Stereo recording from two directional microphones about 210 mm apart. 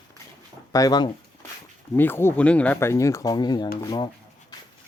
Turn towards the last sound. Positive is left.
turn(degrees=20)  # may be behind; listen again after turning